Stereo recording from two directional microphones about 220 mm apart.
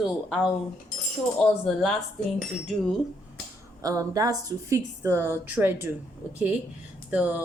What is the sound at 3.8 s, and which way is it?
Speech, 15° right (ahead or behind).